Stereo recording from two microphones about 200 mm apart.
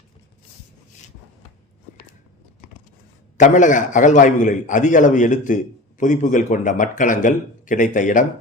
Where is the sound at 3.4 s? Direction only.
40° left (ahead or behind).